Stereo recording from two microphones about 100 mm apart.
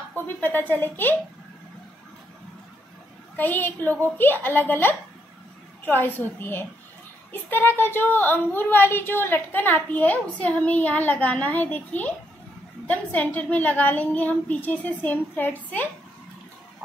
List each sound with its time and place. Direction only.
0.1 s speech: 20° left (ahead or behind)
3.3 s speech: 20° left (ahead or behind)